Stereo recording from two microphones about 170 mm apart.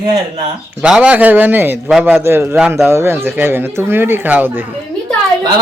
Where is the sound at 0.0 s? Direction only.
20° right (ahead or behind).